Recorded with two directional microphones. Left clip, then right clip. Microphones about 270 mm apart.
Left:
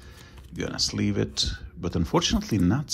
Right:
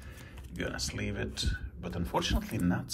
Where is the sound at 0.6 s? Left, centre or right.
Centre.